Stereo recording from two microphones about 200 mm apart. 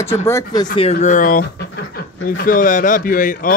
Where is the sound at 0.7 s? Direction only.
35° left (ahead or behind).